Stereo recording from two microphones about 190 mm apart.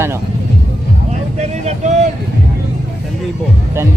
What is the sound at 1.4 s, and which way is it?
Speech, 35° right (ahead or behind).